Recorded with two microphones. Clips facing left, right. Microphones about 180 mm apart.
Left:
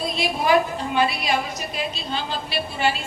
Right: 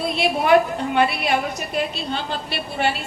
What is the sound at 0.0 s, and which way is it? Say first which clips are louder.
A woman's voice: right 3 dB; 60° right (ahead or behind).